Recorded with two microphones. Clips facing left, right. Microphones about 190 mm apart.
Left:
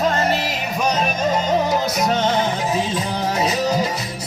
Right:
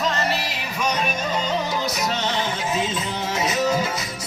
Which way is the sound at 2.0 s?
50° left (ahead or behind).